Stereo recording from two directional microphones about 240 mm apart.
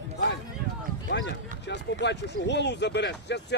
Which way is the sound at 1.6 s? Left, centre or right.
Left.